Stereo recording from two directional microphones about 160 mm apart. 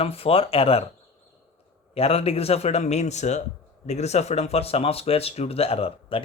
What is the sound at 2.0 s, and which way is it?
Speech, 40° left (ahead or behind).